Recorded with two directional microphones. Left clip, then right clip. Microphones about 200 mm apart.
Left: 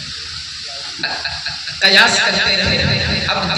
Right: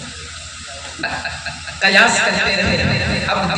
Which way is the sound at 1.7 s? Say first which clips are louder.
Left 1 dB; 35° right (ahead or behind).